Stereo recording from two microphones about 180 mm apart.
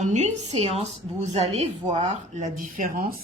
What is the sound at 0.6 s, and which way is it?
Speech, 40° right (ahead or behind).